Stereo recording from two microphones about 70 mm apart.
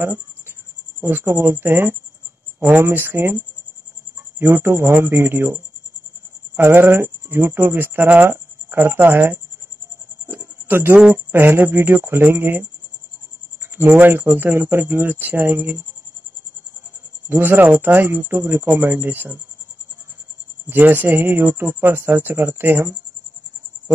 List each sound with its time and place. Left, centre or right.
1.0 s speech: right
10.2 s a sound: right
11.3 s speech: right
13.7 s speech: right
17.3 s speech: right
20.6 s speech: right